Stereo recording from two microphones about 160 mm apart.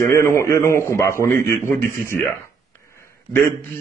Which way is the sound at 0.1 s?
15° left (ahead or behind).